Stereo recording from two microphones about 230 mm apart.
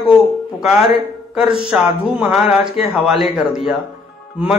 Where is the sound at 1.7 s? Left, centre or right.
Centre.